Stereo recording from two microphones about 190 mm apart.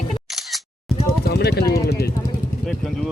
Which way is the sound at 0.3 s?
Centre (ahead or behind).